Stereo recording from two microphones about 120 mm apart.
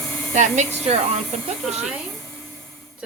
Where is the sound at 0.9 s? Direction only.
65° right (ahead or behind).